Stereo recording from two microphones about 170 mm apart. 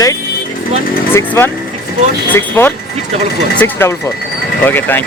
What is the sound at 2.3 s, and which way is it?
Speech, 10° left (ahead or behind).